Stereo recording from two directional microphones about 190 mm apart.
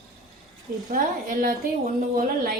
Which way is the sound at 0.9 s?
45° right (ahead or behind).